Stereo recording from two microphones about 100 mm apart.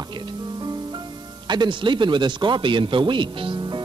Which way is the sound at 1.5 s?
50° right (ahead or behind).